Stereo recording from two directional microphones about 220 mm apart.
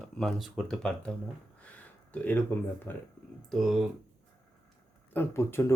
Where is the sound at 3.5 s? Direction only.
Centre (ahead or behind).